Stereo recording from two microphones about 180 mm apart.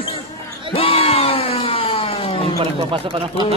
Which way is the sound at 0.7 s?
30° left (ahead or behind).